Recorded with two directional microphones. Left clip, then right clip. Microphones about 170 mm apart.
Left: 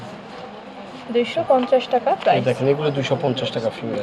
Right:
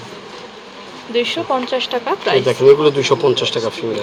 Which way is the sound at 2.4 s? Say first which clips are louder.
Right 9 dB; 35° right (ahead or behind).